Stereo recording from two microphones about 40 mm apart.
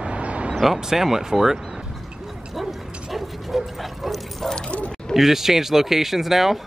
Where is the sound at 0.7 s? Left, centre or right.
Centre.